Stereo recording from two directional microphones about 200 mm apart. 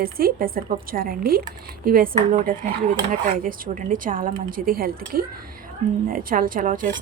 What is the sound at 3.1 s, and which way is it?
Speech, 45° right (ahead or behind).